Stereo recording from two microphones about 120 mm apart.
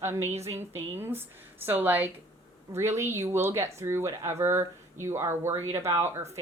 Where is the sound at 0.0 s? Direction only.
20° right (ahead or behind).